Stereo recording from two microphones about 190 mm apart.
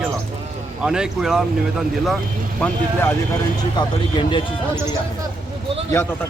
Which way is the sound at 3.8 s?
25° left (ahead or behind).